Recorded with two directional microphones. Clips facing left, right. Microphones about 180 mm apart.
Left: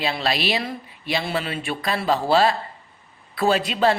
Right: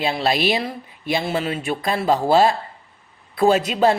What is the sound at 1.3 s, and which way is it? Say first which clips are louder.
A man's voice: right 3 dB; 20° right (ahead or behind).